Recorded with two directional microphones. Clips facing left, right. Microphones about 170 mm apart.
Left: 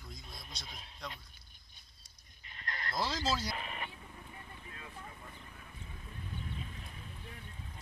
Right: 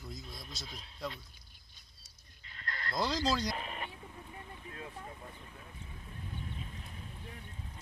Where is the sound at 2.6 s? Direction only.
20° left (ahead or behind).